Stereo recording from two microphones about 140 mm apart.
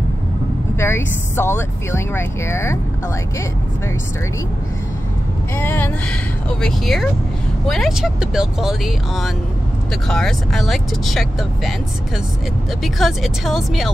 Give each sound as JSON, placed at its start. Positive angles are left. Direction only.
{"t": 0.7, "sound": "speech", "side_deg": 15}
{"t": 5.6, "sound": "speech", "side_deg": 15}
{"t": 6.6, "sound": "speech", "side_deg": 0}
{"t": 12.8, "sound": "speech", "side_deg": 0}